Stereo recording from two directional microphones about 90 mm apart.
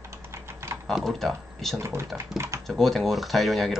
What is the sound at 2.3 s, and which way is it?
Typing, 30° right (ahead or behind).